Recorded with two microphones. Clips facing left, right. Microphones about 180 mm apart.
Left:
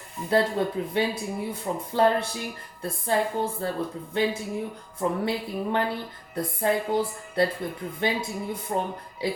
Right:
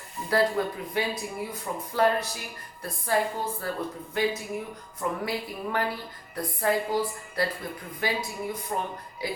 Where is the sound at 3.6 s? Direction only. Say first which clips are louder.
Left 3 dB; 25° left (ahead or behind).